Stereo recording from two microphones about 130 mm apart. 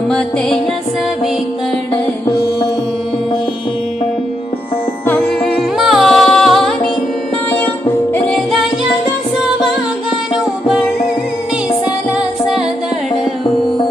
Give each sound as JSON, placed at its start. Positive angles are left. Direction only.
{"t": 5.0, "sound": "music", "side_deg": 15}
{"t": 5.8, "sound": "music", "side_deg": 0}
{"t": 7.5, "sound": "music", "side_deg": 15}